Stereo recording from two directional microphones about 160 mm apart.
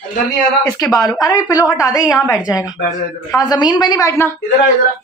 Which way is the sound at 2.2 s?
5° right (ahead or behind).